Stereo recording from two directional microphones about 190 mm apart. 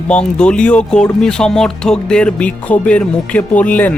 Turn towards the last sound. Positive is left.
turn(degrees=5)  # may be behind; listen again after turning